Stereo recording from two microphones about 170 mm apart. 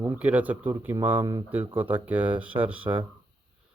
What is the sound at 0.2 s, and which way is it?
Speech, 10° right (ahead or behind).